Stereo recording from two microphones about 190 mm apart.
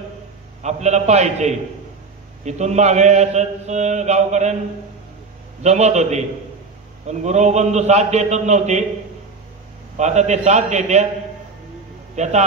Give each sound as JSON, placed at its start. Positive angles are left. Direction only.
{"t": 0.6, "sound": "a man's voice", "side_deg": -35}
{"t": 5.6, "sound": "a man's voice", "side_deg": -35}
{"t": 9.9, "sound": "a man's voice", "side_deg": -35}
{"t": 12.2, "sound": "a man's voice", "side_deg": -35}